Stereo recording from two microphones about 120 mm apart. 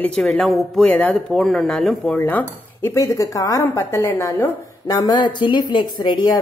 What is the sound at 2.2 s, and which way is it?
Speech, 15° left (ahead or behind).